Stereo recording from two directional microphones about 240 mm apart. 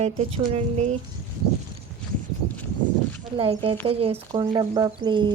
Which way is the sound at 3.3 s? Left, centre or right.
Right.